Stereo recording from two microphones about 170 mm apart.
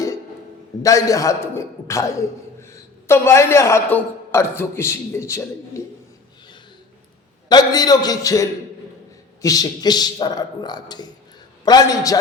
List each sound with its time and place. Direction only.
0.8 s a man's voice: 20° left (ahead or behind)
7.4 s a man's voice: 25° left (ahead or behind)